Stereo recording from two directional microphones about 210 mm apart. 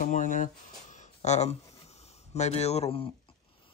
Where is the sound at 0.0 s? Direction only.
40° left (ahead or behind).